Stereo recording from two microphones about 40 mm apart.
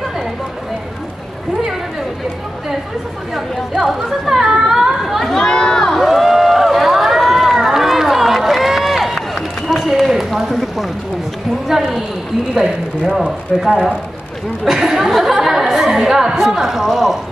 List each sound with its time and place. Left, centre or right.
3.3 s chatter: centre
5.4 s run: left
5.9 s run: centre
11.6 s a woman's voice: centre
13.5 s a woman's voice: centre